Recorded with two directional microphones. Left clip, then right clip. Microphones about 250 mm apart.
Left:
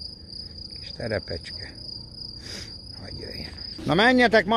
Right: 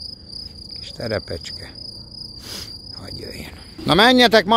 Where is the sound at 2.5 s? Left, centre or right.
Centre.